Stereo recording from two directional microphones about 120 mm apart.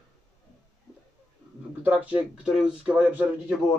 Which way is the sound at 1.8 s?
10° right (ahead or behind).